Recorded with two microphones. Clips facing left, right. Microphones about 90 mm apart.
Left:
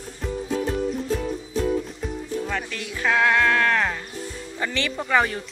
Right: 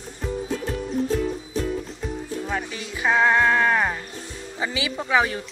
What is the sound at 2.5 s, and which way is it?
Speech, 15° right (ahead or behind).